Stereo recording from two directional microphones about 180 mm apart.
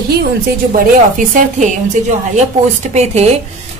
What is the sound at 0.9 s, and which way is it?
Speech, 50° right (ahead or behind).